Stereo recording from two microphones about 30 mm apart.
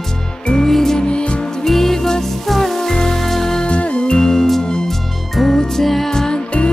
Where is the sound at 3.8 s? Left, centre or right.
Left.